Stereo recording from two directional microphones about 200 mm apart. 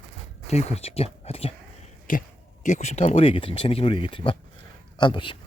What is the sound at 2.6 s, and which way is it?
Speech, 35° left (ahead or behind).